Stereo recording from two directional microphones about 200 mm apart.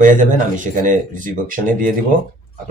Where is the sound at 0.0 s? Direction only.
40° right (ahead or behind).